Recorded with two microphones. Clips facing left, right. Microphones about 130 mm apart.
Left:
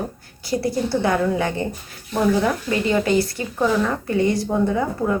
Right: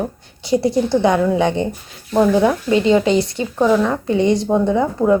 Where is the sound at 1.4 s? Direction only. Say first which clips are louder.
Right 6 dB; 20° right (ahead or behind).